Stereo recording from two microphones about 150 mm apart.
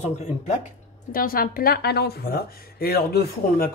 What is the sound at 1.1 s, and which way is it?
Speech, 75° left (ahead or behind).